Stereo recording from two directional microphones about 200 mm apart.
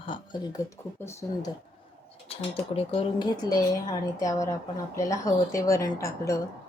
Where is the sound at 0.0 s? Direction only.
25° left (ahead or behind).